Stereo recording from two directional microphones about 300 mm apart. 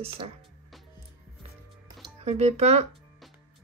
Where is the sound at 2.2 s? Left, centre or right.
Right.